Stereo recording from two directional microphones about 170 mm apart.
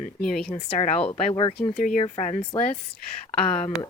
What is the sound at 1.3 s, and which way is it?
Speech, 30° left (ahead or behind).